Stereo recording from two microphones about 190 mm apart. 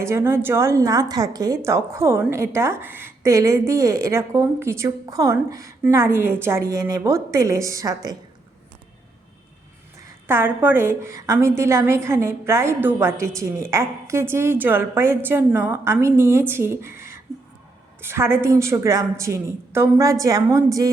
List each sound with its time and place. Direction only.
0.0 s a woman's voice: 15° right (ahead or behind)
10.2 s a woman's voice: 10° right (ahead or behind)